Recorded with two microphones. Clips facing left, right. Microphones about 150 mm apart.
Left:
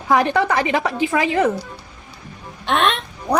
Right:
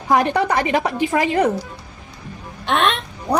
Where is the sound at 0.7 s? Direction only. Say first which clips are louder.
Right 1 dB; 15° right (ahead or behind).